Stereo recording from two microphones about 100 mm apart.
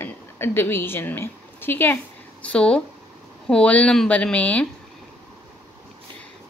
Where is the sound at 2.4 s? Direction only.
10° left (ahead or behind).